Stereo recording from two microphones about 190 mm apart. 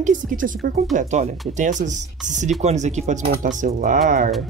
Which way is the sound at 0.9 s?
40° right (ahead or behind).